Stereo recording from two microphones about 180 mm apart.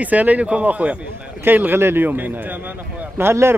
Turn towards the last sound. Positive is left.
turn(degrees=-15)  # may be behind; listen again after turning